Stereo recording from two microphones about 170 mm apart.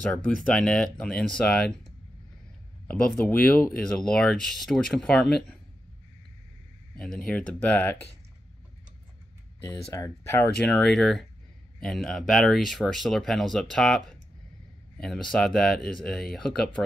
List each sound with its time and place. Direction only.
0.0 s speech: 5° left (ahead or behind)
3.3 s speech: 10° left (ahead or behind)
7.2 s speech: 5° left (ahead or behind)
9.7 s speech: 20° left (ahead or behind)
10.6 s speech: 5° left (ahead or behind)